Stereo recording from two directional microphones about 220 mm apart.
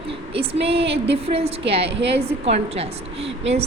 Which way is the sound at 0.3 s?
25° right (ahead or behind).